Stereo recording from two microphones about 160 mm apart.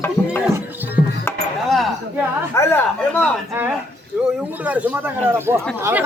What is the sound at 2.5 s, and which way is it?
Speech, 10° left (ahead or behind).